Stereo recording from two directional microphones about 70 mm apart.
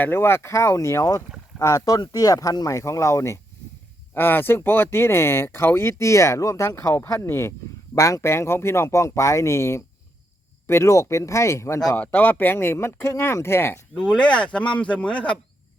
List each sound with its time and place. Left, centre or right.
0.0 s speech: left
4.1 s speech: left
7.9 s speech: left
11.9 s speech: left
13.9 s speech: centre